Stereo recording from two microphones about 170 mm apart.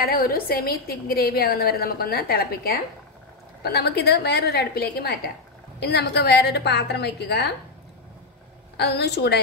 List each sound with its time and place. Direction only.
0.0 s a woman's voice: 60° left (ahead or behind)
8.7 s a woman's voice: 75° left (ahead or behind)